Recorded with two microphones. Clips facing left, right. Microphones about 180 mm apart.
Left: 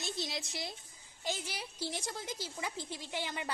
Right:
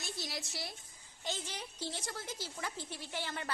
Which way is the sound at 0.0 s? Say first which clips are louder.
Left 3 dB; 20° left (ahead or behind).